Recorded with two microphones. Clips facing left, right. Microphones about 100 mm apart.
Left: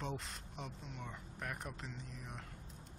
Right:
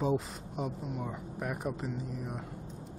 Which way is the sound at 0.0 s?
5° right (ahead or behind).